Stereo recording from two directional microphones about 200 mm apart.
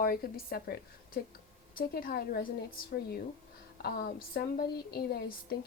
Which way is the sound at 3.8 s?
50° left (ahead or behind).